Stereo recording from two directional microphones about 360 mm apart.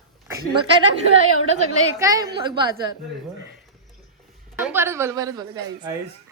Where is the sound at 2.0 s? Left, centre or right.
Centre.